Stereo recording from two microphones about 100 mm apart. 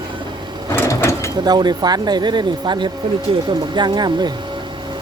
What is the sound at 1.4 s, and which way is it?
Speech, 45° right (ahead or behind).